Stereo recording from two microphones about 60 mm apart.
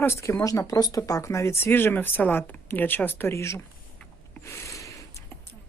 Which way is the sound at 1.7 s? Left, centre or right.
Left.